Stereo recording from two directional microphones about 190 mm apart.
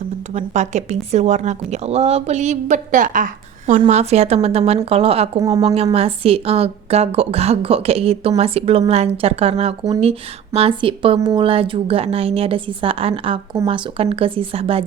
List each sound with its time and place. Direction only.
0.3 s a woman's voice: 40° right (ahead or behind)
5.4 s a woman's voice: 20° right (ahead or behind)
5.6 s a woman's voice: 30° right (ahead or behind)